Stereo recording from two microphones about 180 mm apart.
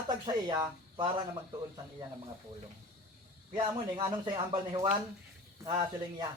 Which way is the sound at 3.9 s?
25° right (ahead or behind).